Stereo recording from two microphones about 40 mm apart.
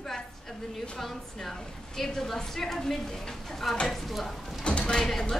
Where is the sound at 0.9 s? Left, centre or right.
Centre.